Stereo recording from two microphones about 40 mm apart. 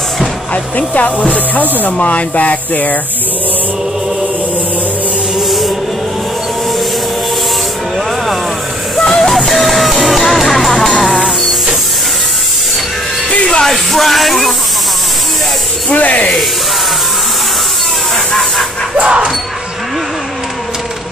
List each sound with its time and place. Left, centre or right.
0.7 s speech: left
8.9 s music: centre
13.7 s music: centre
15.9 s speech: left
18.1 s train: centre
18.9 s music: right